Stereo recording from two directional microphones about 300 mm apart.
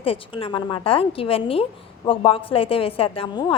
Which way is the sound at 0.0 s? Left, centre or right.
Centre.